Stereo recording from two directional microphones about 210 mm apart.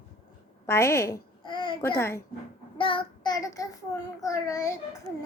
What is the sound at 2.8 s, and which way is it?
Child singing, 25° left (ahead or behind).